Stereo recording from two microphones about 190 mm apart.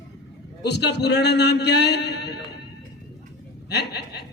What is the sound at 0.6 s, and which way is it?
A man's voice, 65° left (ahead or behind).